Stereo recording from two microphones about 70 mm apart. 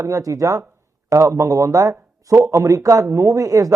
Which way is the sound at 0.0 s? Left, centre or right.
Right.